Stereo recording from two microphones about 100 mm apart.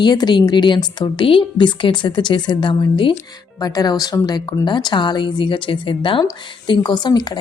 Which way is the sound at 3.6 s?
40° left (ahead or behind).